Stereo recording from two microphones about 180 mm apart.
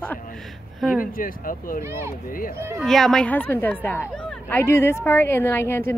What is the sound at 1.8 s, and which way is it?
Speech, 15° right (ahead or behind).